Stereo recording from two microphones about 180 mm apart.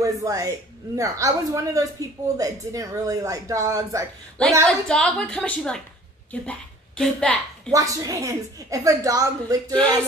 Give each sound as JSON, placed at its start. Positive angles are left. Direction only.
{"t": 0.0, "sound": "a man's voice", "side_deg": -20}
{"t": 4.6, "sound": "a woman's voice", "side_deg": 5}
{"t": 7.7, "sound": "a woman's voice", "side_deg": -20}